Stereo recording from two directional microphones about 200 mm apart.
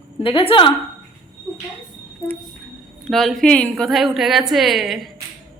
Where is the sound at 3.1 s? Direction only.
Centre (ahead or behind).